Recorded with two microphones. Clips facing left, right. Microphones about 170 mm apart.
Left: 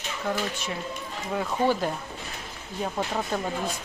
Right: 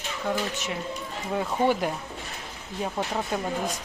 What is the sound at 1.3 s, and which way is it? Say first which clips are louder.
Speech: right 1 dB; 15° right (ahead or behind).